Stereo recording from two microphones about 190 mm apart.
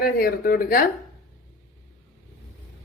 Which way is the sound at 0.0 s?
50° left (ahead or behind).